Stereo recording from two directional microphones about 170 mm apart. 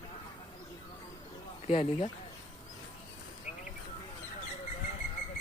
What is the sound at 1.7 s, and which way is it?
Speech, 30° left (ahead or behind).